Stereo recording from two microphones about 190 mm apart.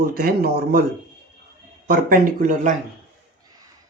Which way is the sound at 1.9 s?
45° right (ahead or behind).